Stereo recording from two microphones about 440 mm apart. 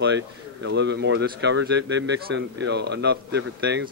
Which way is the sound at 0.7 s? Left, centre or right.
Right.